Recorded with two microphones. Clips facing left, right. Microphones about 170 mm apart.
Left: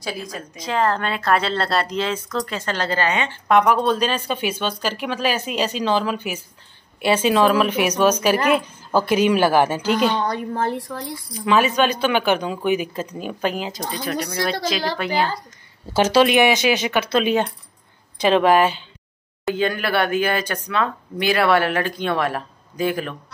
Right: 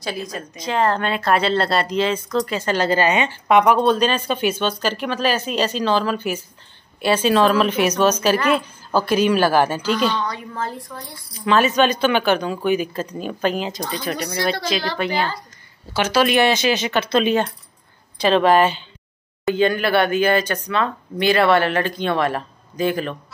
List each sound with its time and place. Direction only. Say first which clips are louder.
0.0 s a woman's voice: right 2 dB; 5° left (ahead or behind)
10.1 s speech: left 3 dB; 50° left (ahead or behind)
10.6 s speech: left 5 dB; 70° left (ahead or behind)
11.4 s speech: right 1 dB; 10° left (ahead or behind)
16.1 s a woman's voice: left 1 dB; 20° left (ahead or behind)